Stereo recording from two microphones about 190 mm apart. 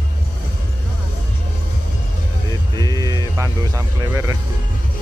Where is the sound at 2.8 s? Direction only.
20° right (ahead or behind).